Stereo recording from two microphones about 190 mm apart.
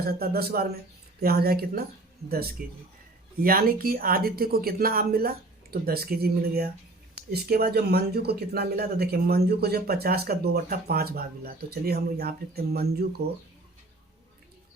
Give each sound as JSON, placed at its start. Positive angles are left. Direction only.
{"t": 0.0, "sound": "speech", "side_deg": -55}